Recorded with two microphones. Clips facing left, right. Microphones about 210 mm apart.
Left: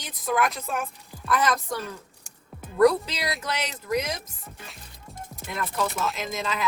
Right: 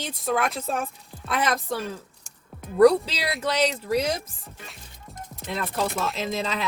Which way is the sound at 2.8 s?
30° right (ahead or behind).